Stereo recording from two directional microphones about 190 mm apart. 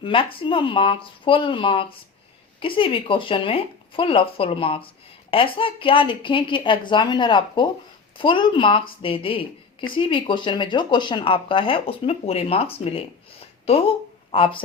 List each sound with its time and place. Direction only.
0.0 s speech: 25° left (ahead or behind)